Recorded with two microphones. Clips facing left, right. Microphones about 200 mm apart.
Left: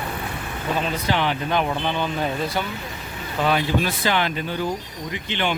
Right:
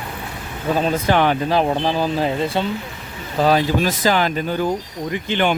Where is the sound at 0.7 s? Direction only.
40° right (ahead or behind).